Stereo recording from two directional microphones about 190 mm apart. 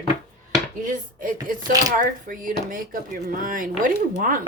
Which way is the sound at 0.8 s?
45° right (ahead or behind).